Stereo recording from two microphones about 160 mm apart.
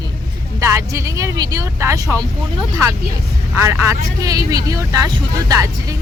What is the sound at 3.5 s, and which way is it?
A man's voice, 15° right (ahead or behind).